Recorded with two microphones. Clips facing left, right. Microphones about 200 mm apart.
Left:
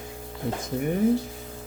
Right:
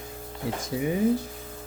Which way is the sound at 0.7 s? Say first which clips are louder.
Even; 5° right (ahead or behind).